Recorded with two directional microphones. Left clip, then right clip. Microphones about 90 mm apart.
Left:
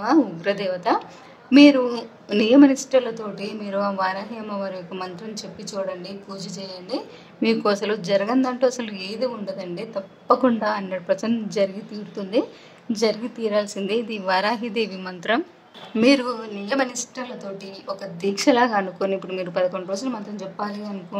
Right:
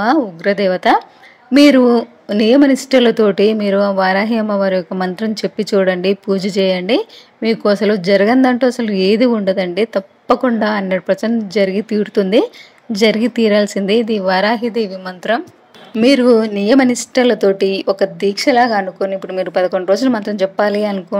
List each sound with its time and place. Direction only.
0.0 s speech: 35° right (ahead or behind); by 3.7 s 50° right (ahead or behind)
3.7 s a woman's voice: 35° right (ahead or behind); by 7.0 s 55° right (ahead or behind)
7.4 s speech: 35° right (ahead or behind)
12.1 s speech: 75° right (ahead or behind)
12.9 s speech: 50° right (ahead or behind)
18.2 s speech: 30° right (ahead or behind)
19.1 s speech: 30° right (ahead or behind); by 20.7 s 50° right (ahead or behind)